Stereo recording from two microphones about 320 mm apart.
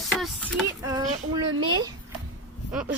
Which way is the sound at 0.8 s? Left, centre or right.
Centre.